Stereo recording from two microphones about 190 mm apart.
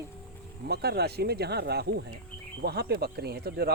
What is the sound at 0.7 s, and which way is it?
Speech, 60° right (ahead or behind).